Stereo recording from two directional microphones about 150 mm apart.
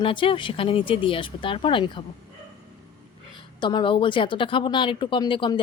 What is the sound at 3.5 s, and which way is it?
Speech, 30° left (ahead or behind).